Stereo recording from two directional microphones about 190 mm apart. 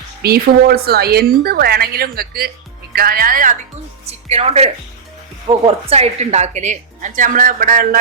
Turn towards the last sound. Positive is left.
turn(degrees=-45)  # may be behind; listen again after turning